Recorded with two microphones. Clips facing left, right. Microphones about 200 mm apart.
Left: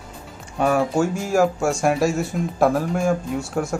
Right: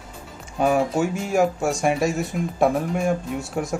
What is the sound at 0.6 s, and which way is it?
Speech, centre (ahead or behind).